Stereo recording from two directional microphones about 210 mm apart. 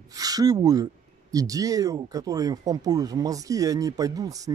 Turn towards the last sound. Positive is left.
turn(degrees=-15)  # may be behind; listen again after turning